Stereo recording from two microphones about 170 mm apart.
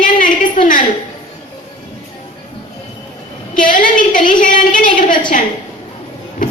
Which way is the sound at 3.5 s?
50° left (ahead or behind).